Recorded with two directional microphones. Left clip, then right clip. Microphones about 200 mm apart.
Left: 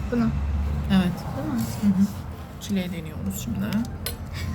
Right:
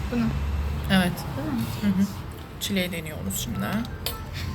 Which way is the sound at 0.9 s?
Centre (ahead or behind).